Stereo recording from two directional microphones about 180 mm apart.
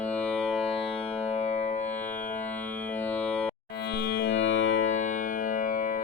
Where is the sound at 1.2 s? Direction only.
40° left (ahead or behind).